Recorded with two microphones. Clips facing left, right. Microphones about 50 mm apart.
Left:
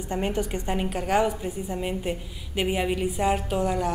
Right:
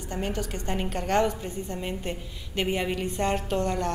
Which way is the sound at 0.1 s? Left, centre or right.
Left.